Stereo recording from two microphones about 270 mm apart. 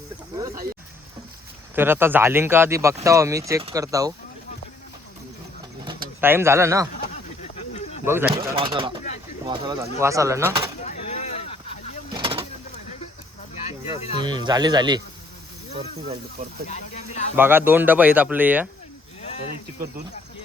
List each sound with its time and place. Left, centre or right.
0.3 s speech: centre
1.7 s speech: centre
6.1 s speech: centre
7.5 s a sound: left
8.0 s speech: centre
10.8 s a sound: left
12.1 s vehicle: centre
13.7 s snake: left
14.2 s speech: centre
16.6 s speech: left
17.3 s speech: centre